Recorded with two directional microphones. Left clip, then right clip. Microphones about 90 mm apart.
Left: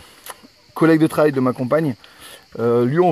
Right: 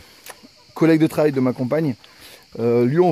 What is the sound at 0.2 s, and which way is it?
Speech, 20° right (ahead or behind).